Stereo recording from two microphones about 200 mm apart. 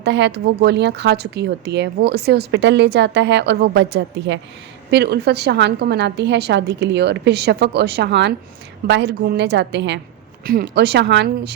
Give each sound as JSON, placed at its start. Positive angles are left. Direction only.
{"t": 0.0, "sound": "a woman's voice", "side_deg": -60}